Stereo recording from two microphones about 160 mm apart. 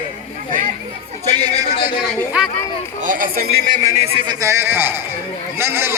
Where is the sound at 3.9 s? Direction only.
40° right (ahead or behind).